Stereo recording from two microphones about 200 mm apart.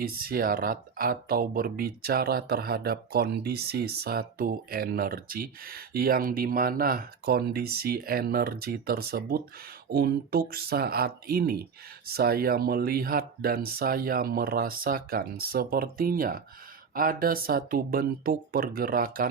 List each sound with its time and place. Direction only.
0.0 s speech: 50° right (ahead or behind)